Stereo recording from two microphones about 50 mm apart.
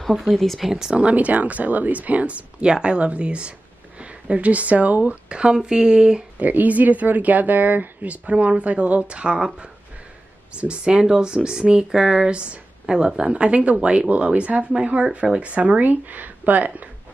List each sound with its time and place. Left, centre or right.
0.3 s speech: centre
0.7 s speech: centre
0.9 s speech: right
6.4 s speech: right
10.6 s speech: right